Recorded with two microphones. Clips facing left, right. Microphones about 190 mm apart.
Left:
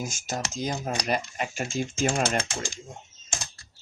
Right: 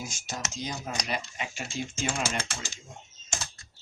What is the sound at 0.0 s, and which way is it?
Speech, 45° left (ahead or behind).